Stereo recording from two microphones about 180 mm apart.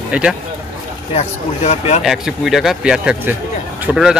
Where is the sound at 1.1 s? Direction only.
35° left (ahead or behind).